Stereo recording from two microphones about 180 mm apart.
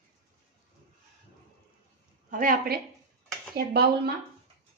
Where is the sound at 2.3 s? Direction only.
50° right (ahead or behind).